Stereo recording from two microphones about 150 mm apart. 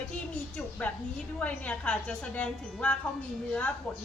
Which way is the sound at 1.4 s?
10° left (ahead or behind).